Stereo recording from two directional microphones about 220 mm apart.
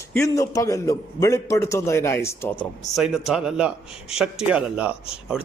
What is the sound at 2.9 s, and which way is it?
A man's voice, centre (ahead or behind).